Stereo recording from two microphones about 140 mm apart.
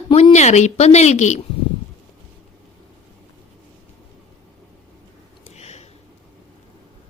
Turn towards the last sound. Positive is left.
turn(degrees=50)  # may be behind; listen again after turning